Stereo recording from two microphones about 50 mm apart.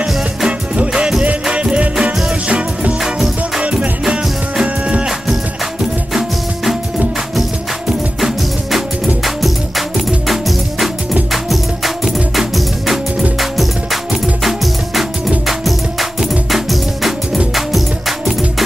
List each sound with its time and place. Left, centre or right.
0.5 s music: centre
3.0 s music: centre
3.6 s music: right
6.1 s music: centre
8.7 s music: centre
14.4 s music: centre